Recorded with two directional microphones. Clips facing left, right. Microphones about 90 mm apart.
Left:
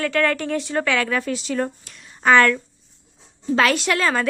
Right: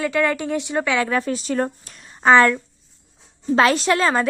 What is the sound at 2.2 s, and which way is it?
A woman's voice, 25° right (ahead or behind).